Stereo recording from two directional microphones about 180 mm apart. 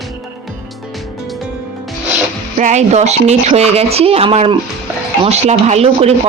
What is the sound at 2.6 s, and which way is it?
Speech, 40° right (ahead or behind).